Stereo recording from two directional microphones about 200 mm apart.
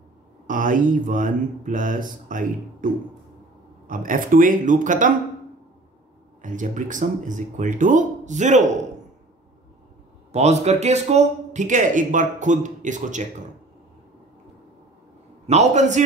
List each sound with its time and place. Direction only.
0.5 s a man's voice: 40° right (ahead or behind)
6.4 s a man's voice: 40° right (ahead or behind)
10.3 s a man's voice: 35° right (ahead or behind)
15.4 s a man's voice: 35° right (ahead or behind)